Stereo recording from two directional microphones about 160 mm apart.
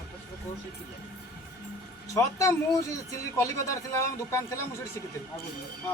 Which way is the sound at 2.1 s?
20° left (ahead or behind).